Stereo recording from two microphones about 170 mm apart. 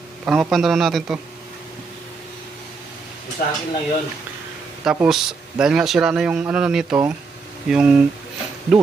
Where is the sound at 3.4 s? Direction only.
60° left (ahead or behind).